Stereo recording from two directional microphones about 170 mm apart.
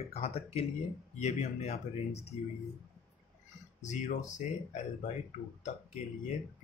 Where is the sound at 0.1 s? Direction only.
40° left (ahead or behind).